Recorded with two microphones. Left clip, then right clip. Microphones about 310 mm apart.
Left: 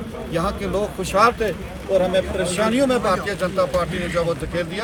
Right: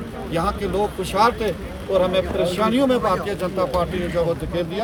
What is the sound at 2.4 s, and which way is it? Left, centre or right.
Speech, right.